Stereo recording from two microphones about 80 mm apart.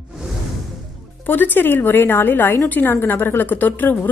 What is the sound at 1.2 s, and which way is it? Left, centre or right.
A woman's voice, left.